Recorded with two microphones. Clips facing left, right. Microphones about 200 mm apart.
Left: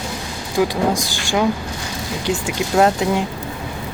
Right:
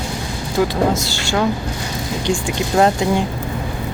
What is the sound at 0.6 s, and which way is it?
Speech, 10° left (ahead or behind).